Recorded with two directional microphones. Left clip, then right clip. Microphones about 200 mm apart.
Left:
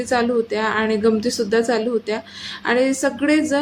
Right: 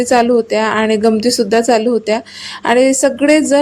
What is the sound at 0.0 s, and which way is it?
A woman's voice, 35° right (ahead or behind).